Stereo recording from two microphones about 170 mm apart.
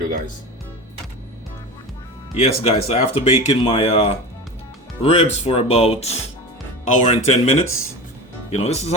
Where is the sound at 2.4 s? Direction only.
35° left (ahead or behind).